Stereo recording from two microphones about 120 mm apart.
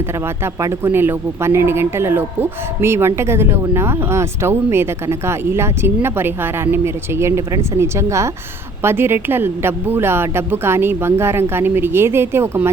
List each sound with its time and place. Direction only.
0.4 s speech: 20° right (ahead or behind)